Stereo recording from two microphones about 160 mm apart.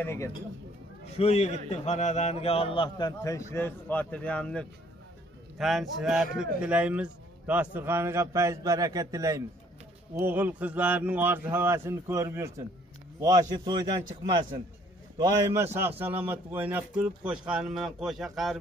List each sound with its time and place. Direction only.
0.0 s speech: 15° left (ahead or behind)
1.0 s a man's voice: 40° left (ahead or behind); by 14.0 s 25° right (ahead or behind)
15.1 s a man's voice: 20° right (ahead or behind); by 18.6 s centre (ahead or behind)